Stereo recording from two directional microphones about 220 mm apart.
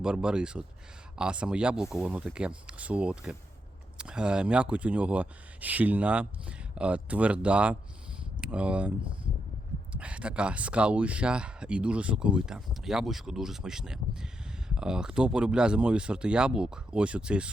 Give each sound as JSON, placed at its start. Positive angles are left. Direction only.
{"t": 0.0, "sound": "speech", "side_deg": -5}
{"t": 9.9, "sound": "speech", "side_deg": -5}